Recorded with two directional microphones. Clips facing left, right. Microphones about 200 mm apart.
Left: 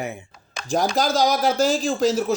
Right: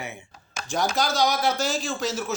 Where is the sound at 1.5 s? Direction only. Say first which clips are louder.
Left 6 dB; 90° left.